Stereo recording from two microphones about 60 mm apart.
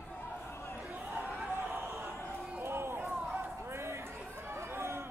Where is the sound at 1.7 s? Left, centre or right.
Right.